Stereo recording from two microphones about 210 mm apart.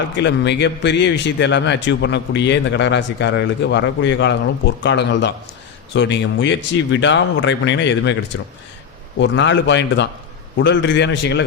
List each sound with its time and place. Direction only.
0.2 s a man's voice: 55° left (ahead or behind)
9.1 s a man's voice: 60° left (ahead or behind)